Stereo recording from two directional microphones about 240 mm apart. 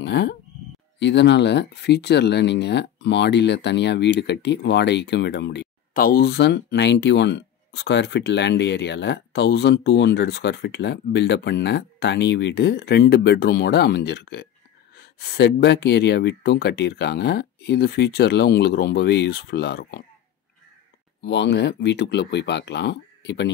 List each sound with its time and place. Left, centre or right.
0.0 s speech: left
21.2 s speech: left